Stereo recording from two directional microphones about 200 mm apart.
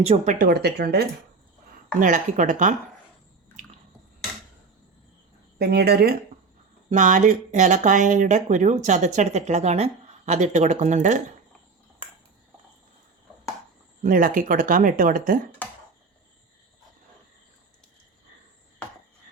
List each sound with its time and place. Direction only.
0.0 s speech: 30° right (ahead or behind)
0.3 s speech: 50° right (ahead or behind)
2.0 s speech: 40° right (ahead or behind)
5.5 s speech: 55° right (ahead or behind)
6.9 s speech: 40° right (ahead or behind)
14.0 s speech: 45° right (ahead or behind)